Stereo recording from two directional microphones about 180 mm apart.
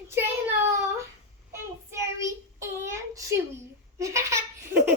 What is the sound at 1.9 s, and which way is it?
Child singing, 15° right (ahead or behind).